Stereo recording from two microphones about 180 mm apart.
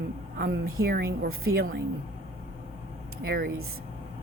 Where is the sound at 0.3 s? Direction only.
55° right (ahead or behind).